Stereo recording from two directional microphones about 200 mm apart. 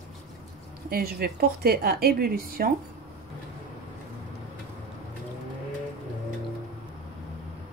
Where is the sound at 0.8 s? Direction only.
50° right (ahead or behind).